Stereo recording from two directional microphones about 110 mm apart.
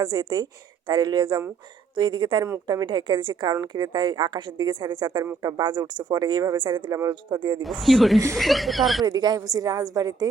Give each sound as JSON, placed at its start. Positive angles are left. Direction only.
{"t": 0.0, "sound": "a woman's voice", "side_deg": -40}
{"t": 7.6, "sound": "speech", "side_deg": 0}
{"t": 9.0, "sound": "a woman's voice", "side_deg": -40}